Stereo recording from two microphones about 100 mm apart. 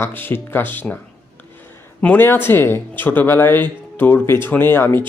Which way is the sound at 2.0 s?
15° left (ahead or behind).